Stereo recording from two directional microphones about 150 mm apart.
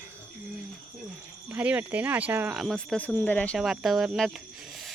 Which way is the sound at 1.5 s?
10° right (ahead or behind).